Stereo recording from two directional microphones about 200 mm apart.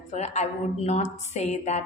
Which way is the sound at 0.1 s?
35° left (ahead or behind).